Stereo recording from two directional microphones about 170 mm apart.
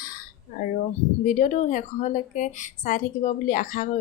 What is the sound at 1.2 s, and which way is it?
Speech, 45° left (ahead or behind).